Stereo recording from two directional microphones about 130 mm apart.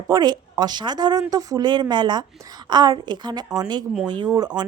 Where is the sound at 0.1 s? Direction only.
30° right (ahead or behind).